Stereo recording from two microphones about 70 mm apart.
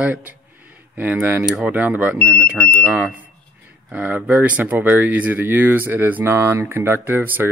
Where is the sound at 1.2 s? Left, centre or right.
Right.